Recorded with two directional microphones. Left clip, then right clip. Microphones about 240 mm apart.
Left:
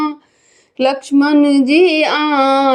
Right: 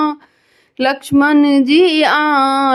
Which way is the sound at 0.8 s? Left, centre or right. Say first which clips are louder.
Even; centre.